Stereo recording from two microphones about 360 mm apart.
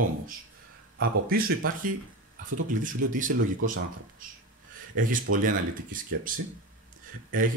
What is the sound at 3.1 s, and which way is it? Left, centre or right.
Speech, right.